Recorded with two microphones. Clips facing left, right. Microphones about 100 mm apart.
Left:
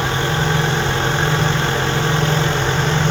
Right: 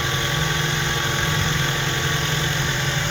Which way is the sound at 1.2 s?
50° left (ahead or behind).